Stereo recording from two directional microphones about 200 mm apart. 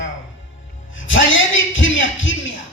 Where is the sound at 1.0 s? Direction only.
75° left (ahead or behind).